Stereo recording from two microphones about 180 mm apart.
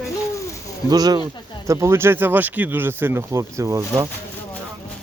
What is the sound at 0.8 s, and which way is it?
Speech, 20° right (ahead or behind).